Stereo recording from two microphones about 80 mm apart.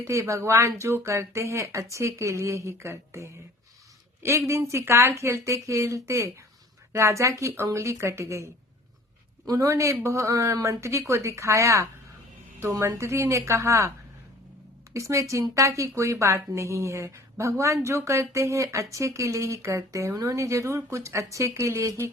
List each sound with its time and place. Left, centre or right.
0.0 s a woman's voice: right
9.5 s a woman's voice: right
14.9 s a woman's voice: right